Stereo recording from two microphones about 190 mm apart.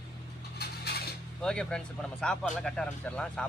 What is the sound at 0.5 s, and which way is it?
Mechanisms, 55° left (ahead or behind).